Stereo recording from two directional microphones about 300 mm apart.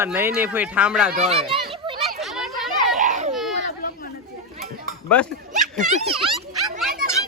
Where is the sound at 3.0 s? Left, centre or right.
Right.